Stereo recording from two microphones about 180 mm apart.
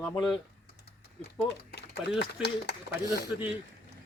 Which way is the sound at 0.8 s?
60° left (ahead or behind).